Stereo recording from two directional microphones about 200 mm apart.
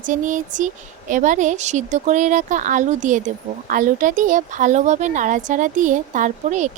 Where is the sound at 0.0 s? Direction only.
40° right (ahead or behind).